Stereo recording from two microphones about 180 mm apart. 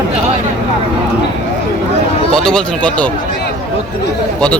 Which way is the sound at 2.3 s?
5° left (ahead or behind).